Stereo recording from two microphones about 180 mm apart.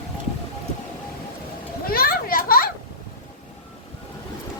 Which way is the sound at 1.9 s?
55° left (ahead or behind).